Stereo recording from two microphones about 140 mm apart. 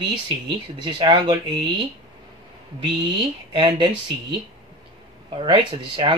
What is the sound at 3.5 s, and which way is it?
Speech, 35° right (ahead or behind).